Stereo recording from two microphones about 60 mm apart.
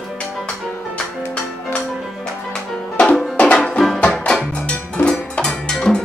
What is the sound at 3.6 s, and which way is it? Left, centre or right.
Music, centre.